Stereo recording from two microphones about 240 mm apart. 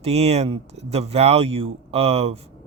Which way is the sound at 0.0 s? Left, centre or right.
Right.